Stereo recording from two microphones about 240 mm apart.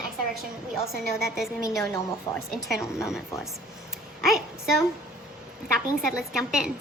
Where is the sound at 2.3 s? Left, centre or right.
Centre.